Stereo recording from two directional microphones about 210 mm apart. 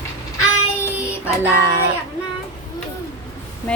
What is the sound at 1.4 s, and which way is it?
Speech, 15° right (ahead or behind).